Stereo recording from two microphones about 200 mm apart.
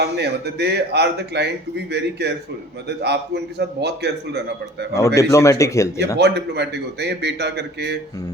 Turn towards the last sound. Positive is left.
turn(degrees=-55)  # may be behind; listen again after turning